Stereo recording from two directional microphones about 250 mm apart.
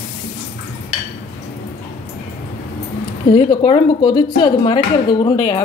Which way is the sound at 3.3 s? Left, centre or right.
Centre.